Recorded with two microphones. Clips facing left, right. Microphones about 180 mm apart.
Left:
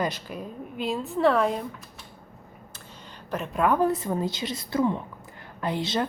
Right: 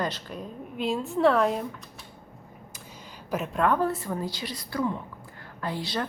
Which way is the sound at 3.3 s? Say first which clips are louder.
Even; 5° right (ahead or behind).